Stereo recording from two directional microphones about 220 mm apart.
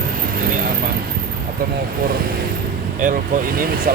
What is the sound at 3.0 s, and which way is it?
Speech, 40° right (ahead or behind).